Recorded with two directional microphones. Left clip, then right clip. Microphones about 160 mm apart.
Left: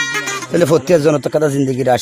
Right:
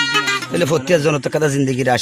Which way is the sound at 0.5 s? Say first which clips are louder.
Left 6 dB; 35° left (ahead or behind).